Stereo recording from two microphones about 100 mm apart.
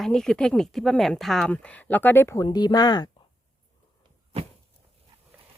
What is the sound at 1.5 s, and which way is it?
Speech, 15° left (ahead or behind).